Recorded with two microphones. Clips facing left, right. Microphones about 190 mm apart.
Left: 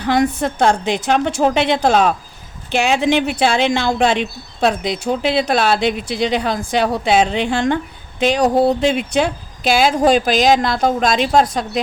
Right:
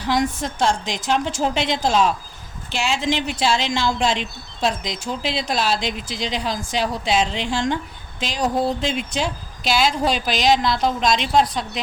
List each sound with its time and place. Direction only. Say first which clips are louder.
0.0 s speech: left 5 dB; 60° left (ahead or behind)